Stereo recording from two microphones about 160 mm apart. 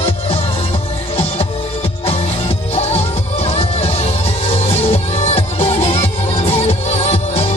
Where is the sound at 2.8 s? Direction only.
40° left (ahead or behind).